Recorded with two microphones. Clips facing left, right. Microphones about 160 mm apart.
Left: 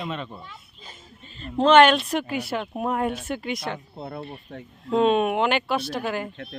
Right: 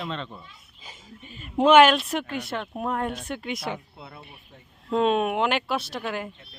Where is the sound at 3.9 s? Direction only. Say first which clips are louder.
Left 9 dB; 40° left (ahead or behind).